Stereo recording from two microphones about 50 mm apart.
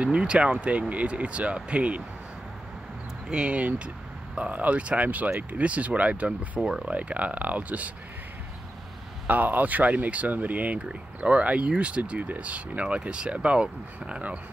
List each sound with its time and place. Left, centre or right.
0.0 s speech: right
3.3 s speech: right
6.6 s speech: centre
6.9 s speech: right
9.3 s speech: right